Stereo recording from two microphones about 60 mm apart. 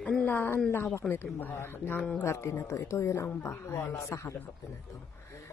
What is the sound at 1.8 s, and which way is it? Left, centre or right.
Speech, left.